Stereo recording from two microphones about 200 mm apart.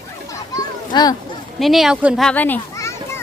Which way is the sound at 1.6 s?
Centre (ahead or behind).